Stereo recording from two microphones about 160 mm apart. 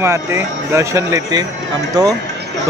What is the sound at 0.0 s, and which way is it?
A man's voice, 15° right (ahead or behind).